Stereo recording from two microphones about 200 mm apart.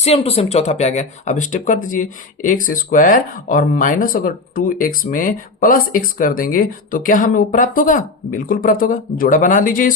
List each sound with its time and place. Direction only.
0.0 s speech: 30° left (ahead or behind)